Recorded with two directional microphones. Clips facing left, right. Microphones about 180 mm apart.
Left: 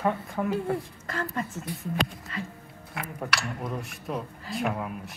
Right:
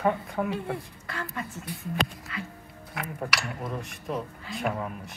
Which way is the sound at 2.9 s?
Centre (ahead or behind).